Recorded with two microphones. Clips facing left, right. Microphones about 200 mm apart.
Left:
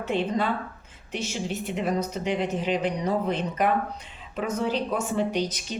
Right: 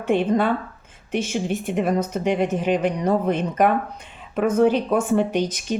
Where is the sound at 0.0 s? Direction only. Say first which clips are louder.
Right 6 dB; 50° right (ahead or behind).